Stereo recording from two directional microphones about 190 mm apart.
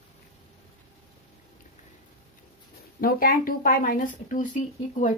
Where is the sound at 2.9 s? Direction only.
50° left (ahead or behind).